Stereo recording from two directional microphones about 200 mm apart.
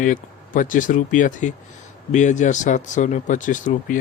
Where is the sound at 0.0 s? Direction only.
40° left (ahead or behind).